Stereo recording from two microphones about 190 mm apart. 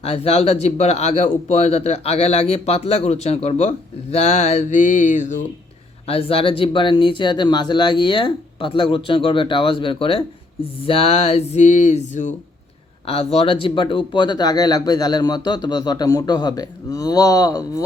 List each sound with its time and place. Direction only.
0.0 s speech: 30° left (ahead or behind)
6.1 s speech: 30° left (ahead or behind)